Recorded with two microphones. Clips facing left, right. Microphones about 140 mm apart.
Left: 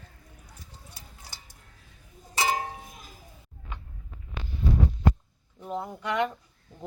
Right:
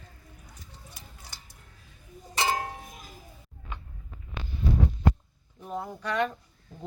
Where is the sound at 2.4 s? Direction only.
5° left (ahead or behind).